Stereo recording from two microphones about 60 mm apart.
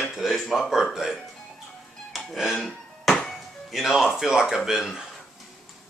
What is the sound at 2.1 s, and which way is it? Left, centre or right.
Speech, centre.